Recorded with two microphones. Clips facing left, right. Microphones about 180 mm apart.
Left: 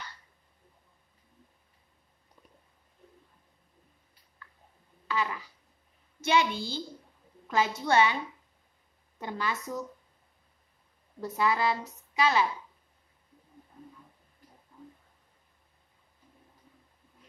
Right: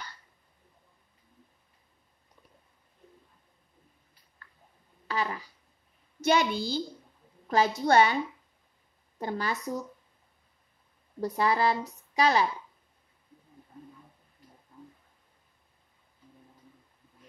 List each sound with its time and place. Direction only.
5.0 s a sound: 40° right (ahead or behind)
6.2 s a woman's voice: 40° right (ahead or behind)
9.2 s a woman's voice: 40° right (ahead or behind)
11.1 s a woman's voice: 35° right (ahead or behind)